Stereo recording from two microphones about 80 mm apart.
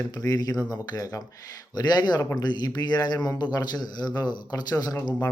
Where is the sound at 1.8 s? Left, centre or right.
Left.